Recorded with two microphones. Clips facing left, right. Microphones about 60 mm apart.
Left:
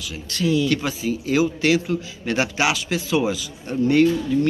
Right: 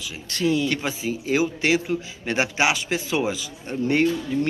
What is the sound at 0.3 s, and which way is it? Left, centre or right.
Speech, right.